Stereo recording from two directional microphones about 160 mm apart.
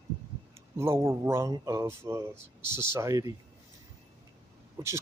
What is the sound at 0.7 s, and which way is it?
Speech, 15° right (ahead or behind).